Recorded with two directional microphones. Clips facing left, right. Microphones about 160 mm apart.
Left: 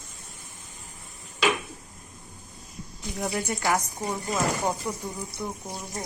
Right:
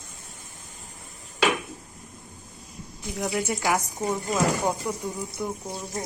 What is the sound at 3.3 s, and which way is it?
Speech, centre (ahead or behind).